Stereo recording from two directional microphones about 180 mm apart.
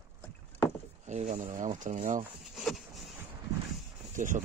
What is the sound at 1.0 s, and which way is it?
Speech, 40° right (ahead or behind).